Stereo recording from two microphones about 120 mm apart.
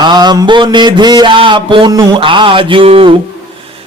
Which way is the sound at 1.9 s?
30° right (ahead or behind).